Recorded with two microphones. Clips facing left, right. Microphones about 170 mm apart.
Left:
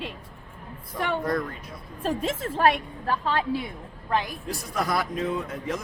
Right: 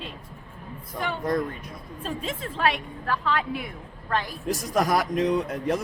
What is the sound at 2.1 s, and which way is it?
Speech, 50° left (ahead or behind).